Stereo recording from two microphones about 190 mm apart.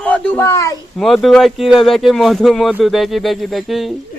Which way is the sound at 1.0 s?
Centre (ahead or behind).